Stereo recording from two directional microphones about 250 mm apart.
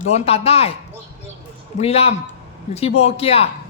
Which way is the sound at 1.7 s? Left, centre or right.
Left.